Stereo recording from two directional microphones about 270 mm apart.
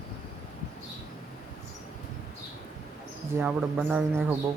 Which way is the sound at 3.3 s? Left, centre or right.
Centre.